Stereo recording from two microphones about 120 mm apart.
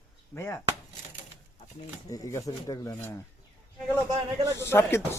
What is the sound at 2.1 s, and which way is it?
Speech, 30° left (ahead or behind).